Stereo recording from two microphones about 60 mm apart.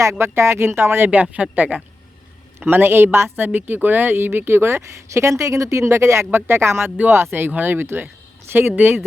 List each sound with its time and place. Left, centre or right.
0.0 s speech: right
1.1 s speech: right
2.6 s speech: right